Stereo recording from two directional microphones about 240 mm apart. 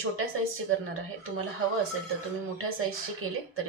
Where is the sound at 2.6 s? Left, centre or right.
Right.